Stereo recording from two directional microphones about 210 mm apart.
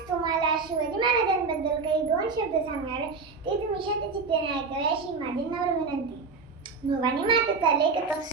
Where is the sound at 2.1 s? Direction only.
20° right (ahead or behind).